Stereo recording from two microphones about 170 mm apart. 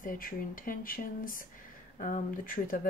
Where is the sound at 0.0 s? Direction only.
55° left (ahead or behind).